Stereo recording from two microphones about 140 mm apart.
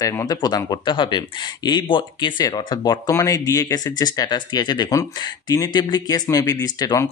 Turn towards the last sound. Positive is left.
turn(degrees=25)  # may be behind; listen again after turning